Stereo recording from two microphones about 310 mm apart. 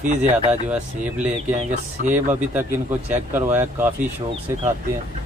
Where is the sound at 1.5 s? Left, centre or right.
Right.